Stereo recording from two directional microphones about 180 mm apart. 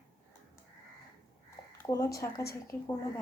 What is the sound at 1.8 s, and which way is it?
Speech, 20° left (ahead or behind).